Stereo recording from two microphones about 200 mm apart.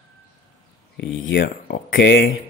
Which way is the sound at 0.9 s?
60° left (ahead or behind).